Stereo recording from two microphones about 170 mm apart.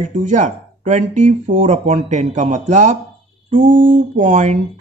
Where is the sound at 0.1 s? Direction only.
45° right (ahead or behind).